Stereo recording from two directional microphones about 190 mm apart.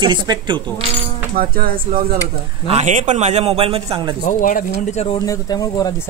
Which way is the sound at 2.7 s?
40° right (ahead or behind).